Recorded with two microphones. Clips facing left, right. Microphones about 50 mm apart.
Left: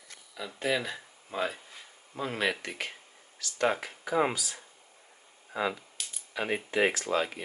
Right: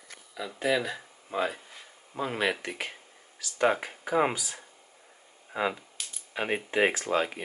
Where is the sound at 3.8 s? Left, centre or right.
Centre.